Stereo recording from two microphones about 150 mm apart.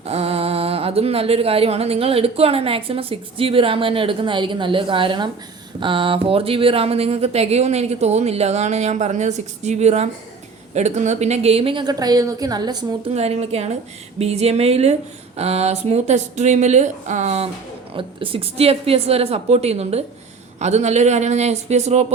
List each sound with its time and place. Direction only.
0.0 s speech: 40° right (ahead or behind)
13.1 s speech: 45° right (ahead or behind)
17.9 s speech: 35° right (ahead or behind)